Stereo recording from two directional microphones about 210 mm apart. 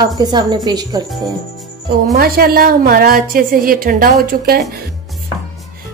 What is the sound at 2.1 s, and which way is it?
A woman's voice, 45° right (ahead or behind).